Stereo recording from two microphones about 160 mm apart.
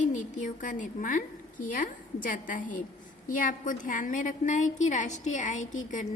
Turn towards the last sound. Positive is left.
turn(degrees=50)  # may be behind; listen again after turning